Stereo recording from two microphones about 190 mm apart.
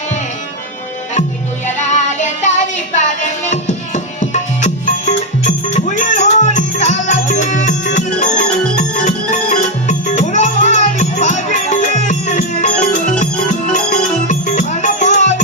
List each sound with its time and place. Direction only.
1.9 s music: 40° left (ahead or behind)
3.5 s music: 40° left (ahead or behind)
14.3 s music: 40° left (ahead or behind)